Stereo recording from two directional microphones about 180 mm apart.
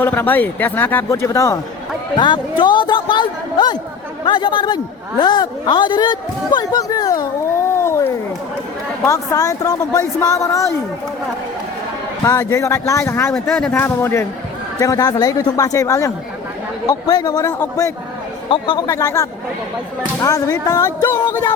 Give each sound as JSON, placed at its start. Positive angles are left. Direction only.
{"t": 0.0, "sound": "a man's voice", "side_deg": 10}
{"t": 12.2, "sound": "speech", "side_deg": 15}
{"t": 13.3, "sound": "speech", "side_deg": 5}
{"t": 18.9, "sound": "speech", "side_deg": 15}